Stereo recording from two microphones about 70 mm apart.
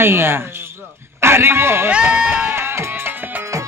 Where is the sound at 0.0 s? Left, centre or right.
Right.